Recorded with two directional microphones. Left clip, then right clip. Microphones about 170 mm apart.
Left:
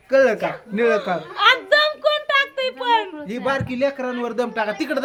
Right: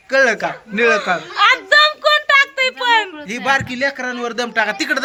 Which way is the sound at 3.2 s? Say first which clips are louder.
Right 6 dB; 5° left (ahead or behind).